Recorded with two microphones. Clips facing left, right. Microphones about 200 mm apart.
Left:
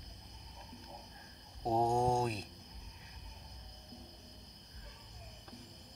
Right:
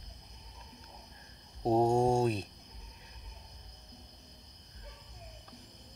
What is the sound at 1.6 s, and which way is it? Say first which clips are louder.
Mantra: right 5 dB; 30° right (ahead or behind).